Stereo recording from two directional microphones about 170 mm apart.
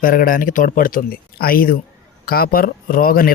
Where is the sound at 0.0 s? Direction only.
55° left (ahead or behind).